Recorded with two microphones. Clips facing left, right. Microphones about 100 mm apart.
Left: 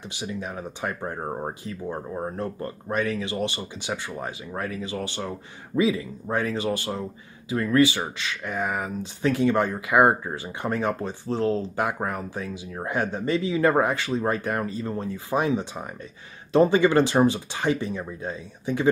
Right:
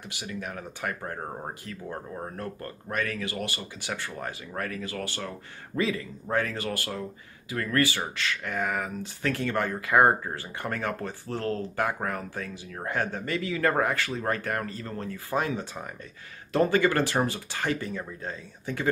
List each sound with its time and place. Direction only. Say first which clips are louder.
0.1 s speech: left 4 dB; 20° left (ahead or behind)